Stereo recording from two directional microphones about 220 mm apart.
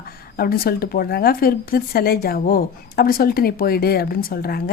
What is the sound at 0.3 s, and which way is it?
A woman's voice, 45° left (ahead or behind).